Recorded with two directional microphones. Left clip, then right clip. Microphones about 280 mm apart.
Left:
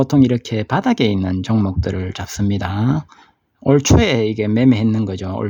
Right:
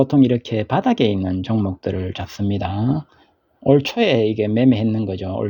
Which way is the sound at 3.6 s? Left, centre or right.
Centre.